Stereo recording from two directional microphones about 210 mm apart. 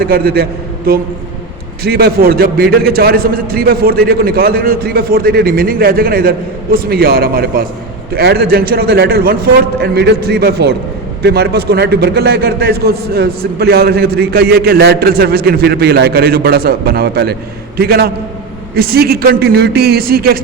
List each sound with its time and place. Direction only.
0.0 s a man's voice: 45° right (ahead or behind)
1.8 s a man's voice: 50° right (ahead or behind)